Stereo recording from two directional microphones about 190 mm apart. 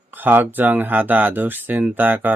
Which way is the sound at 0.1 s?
10° right (ahead or behind).